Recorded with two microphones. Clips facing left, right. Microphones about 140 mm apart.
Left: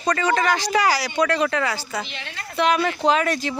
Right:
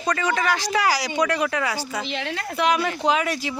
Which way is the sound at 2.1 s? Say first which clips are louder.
Right 8 dB; 90° right.